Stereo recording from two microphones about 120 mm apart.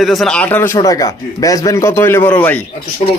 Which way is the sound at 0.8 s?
30° left (ahead or behind).